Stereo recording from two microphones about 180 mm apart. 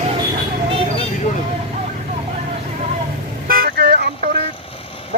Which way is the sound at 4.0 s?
65° right (ahead or behind).